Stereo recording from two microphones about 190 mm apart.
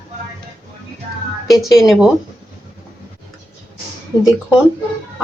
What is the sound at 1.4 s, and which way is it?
Speech, centre (ahead or behind).